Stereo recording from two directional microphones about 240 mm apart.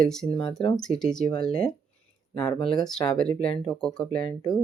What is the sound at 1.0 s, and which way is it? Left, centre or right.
Speech, centre.